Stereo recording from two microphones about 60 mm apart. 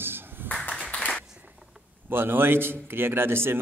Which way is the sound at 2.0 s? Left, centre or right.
Right.